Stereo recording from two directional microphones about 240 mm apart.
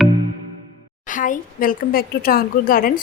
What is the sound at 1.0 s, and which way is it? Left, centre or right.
A woman's voice, left.